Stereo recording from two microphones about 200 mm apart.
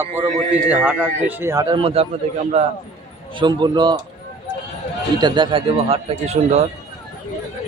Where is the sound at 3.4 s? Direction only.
20° right (ahead or behind).